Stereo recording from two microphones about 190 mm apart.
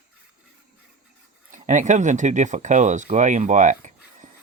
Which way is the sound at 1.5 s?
40° right (ahead or behind).